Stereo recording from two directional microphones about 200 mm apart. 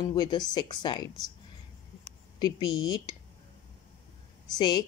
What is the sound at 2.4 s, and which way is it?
Speech, 20° left (ahead or behind).